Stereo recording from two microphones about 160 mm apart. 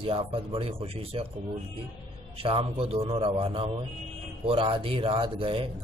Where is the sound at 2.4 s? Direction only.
35° right (ahead or behind).